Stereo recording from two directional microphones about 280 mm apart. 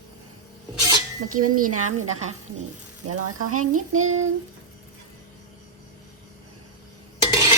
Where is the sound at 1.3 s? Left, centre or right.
Right.